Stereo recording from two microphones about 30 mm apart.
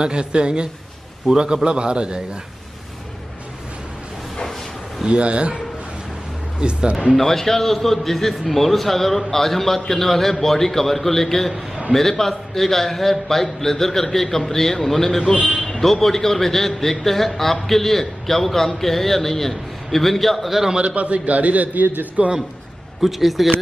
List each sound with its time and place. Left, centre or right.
0.0 s a man's voice: right
5.0 s a man's voice: right
6.6 s a man's voice: right
7.2 s a man's voice: centre
20.7 s a man's voice: right
23.0 s speech: centre